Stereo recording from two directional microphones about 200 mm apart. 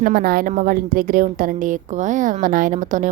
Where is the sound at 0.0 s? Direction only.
50° right (ahead or behind).